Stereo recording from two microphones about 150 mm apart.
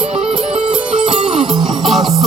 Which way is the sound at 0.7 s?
5° right (ahead or behind).